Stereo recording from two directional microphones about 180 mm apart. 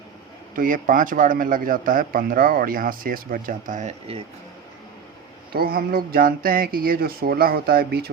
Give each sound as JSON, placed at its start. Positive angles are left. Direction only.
{"t": 0.5, "sound": "a man's voice", "side_deg": -50}
{"t": 5.5, "sound": "speech", "side_deg": -55}